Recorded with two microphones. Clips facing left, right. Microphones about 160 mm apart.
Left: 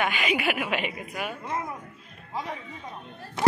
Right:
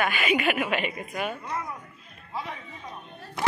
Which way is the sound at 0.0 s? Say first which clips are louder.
Right 1 dB; 15° left (ahead or behind).